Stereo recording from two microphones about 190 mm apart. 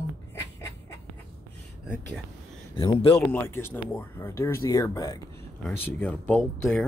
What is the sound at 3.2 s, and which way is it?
Speech, 15° left (ahead or behind).